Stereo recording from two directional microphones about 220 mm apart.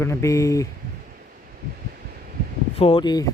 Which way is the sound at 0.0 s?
15° left (ahead or behind).